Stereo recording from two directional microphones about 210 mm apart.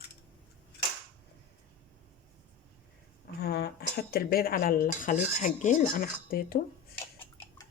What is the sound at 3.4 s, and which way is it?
Speech, 50° left (ahead or behind).